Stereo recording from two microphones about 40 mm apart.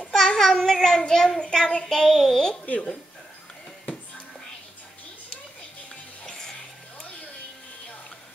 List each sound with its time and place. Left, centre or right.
0.0 s a child's voice: centre
1.7 s child singing: centre
2.6 s speech: left